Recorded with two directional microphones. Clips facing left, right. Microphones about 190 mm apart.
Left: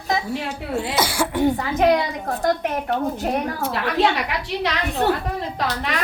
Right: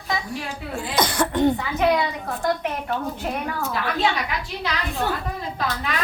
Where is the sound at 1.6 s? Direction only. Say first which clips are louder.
Left 3 dB; 40° left (ahead or behind).